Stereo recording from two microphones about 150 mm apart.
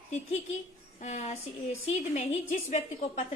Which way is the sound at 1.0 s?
50° left (ahead or behind).